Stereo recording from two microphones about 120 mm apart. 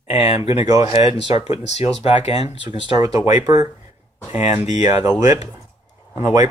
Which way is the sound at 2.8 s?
35° right (ahead or behind).